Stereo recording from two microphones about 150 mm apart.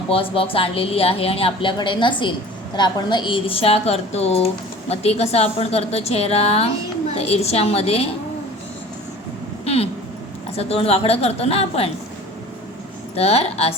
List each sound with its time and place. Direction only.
0.1 s a woman's voice: 40° left (ahead or behind)
9.6 s a sound: 40° left (ahead or behind)
10.6 s a woman's voice: 40° left (ahead or behind)
13.1 s a woman's voice: 45° left (ahead or behind)